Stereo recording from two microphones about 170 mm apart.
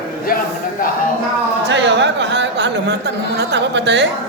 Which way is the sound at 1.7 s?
90° right.